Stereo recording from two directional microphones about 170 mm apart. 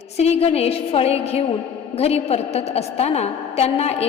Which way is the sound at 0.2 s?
35° left (ahead or behind).